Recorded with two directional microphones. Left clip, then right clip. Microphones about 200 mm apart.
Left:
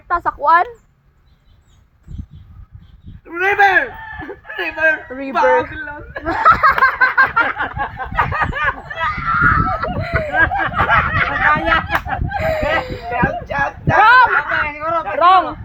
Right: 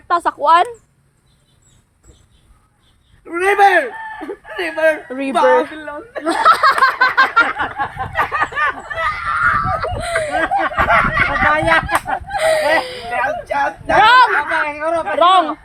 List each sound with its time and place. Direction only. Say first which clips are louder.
0.1 s speech: right 1 dB; 35° right (ahead or behind)
3.2 s speech: right 1 dB; 5° right (ahead or behind)
5.0 s speech: right 4 dB; 35° right (ahead or behind)
5.3 s speech: right 1 dB; 5° right (ahead or behind)
6.2 s laughter: even; 30° right (ahead or behind)
7.4 s speech: right 1 dB; 10° right (ahead or behind)
10.0 s laughter: right 2 dB; 30° right (ahead or behind)
10.3 s speech: left 2 dB; 10° right (ahead or behind)
12.4 s speech: right 5 dB; 35° right (ahead or behind)
12.8 s laughter: right 1 dB; 30° right (ahead or behind)
13.1 s speech: even; 5° right (ahead or behind)
14.0 s speech: even; 30° right (ahead or behind)
14.3 s speech: even; 5° right (ahead or behind)
15.2 s speech: even; 35° right (ahead or behind)